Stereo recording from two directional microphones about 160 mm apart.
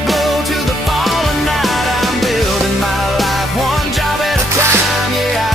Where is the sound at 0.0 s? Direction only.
Centre (ahead or behind).